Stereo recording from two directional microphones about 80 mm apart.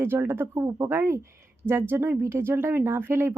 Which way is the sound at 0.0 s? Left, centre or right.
Right.